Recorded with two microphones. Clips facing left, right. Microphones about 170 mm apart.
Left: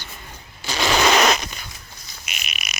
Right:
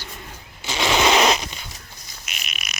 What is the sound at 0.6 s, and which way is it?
Zipper, 20° right (ahead or behind).